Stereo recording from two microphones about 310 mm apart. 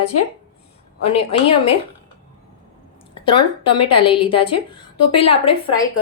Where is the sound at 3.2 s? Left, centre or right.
Centre.